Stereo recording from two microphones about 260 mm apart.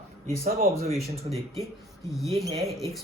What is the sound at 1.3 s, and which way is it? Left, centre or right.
Speech, right.